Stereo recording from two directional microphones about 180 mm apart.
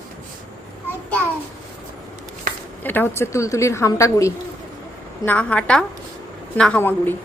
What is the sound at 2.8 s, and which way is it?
A woman's voice, 10° left (ahead or behind).